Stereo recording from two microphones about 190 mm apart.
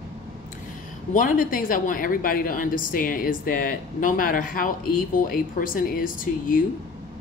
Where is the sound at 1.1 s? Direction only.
45° left (ahead or behind).